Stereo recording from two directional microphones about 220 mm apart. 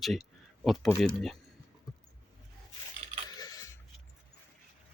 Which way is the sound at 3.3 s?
15° left (ahead or behind).